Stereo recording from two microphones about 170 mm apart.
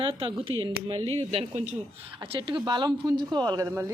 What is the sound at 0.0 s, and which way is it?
A woman's voice, 30° right (ahead or behind).